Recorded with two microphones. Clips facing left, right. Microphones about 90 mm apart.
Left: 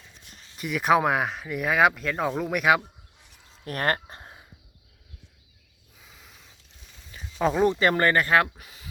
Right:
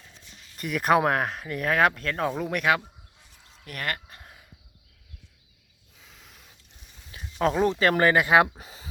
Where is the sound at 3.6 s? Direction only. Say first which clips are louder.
Left 6 dB; 40° left (ahead or behind).